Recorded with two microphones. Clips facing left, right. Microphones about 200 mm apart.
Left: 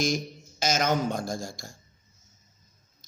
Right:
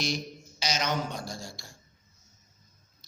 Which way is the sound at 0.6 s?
50° left (ahead or behind).